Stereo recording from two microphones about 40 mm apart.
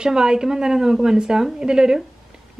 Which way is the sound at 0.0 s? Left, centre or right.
Centre.